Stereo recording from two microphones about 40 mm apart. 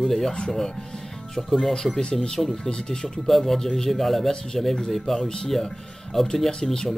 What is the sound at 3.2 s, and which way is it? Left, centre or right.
Speech, centre.